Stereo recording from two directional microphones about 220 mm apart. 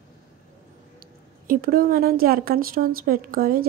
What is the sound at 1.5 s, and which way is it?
A woman's voice, 40° right (ahead or behind).